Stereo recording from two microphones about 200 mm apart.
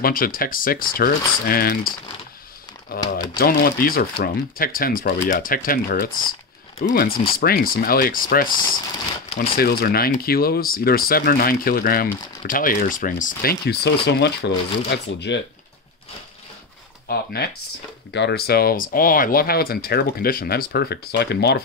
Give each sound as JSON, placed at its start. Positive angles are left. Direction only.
{"t": 0.0, "sound": "speech", "side_deg": 45}
{"t": 17.1, "sound": "speech", "side_deg": 50}